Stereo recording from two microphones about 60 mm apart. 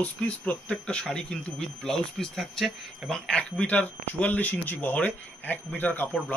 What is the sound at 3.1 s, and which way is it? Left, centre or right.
Speech, centre.